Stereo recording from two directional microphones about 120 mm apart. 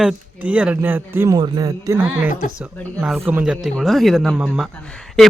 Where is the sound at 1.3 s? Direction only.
35° right (ahead or behind).